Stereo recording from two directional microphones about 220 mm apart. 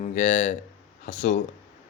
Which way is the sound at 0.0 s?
35° left (ahead or behind).